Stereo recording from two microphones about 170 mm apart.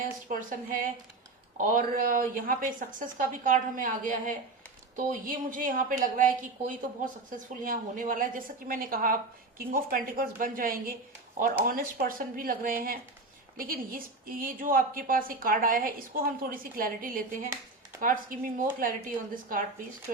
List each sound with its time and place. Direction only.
0.0 s a woman's voice: 50° right (ahead or behind)